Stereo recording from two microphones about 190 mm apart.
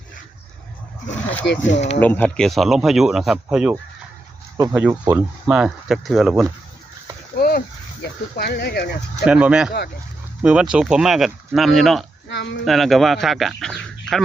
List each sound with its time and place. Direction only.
1.6 s speech: 35° left (ahead or behind)
2.0 s speech: 10° left (ahead or behind)
7.3 s a sound: 50° left (ahead or behind)
8.4 s speech: 55° left (ahead or behind)
9.2 s speech: 5° right (ahead or behind)
12.3 s speech: 65° left (ahead or behind)
12.6 s speech: centre (ahead or behind)